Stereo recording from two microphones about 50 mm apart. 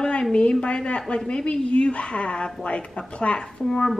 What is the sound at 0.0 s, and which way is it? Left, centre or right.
A woman's voice, centre.